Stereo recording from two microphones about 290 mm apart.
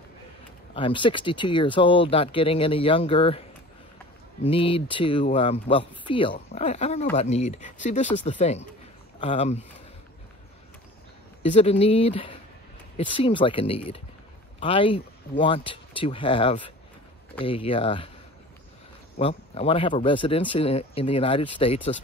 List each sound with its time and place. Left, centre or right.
0.7 s speech: centre
11.5 s speech: left
19.1 s speech: centre